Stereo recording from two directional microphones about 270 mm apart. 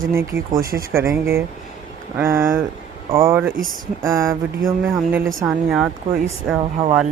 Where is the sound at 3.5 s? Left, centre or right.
Right.